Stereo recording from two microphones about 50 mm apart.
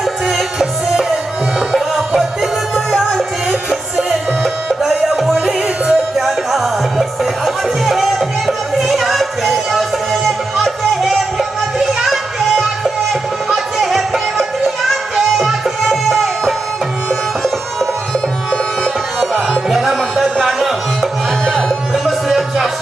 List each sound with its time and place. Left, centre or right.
0.0 s music: centre
5.0 s music: centre
5.6 s music: centre
6.2 s music: centre
19.2 s music: centre
21.4 s music: centre
21.9 s music: centre